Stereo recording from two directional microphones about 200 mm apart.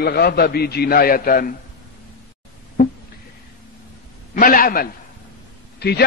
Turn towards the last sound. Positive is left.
turn(degrees=55)  # may be behind; listen again after turning